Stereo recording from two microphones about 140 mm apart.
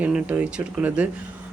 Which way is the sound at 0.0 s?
10° right (ahead or behind).